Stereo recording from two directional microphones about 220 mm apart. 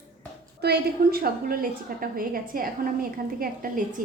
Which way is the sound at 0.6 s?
45° right (ahead or behind).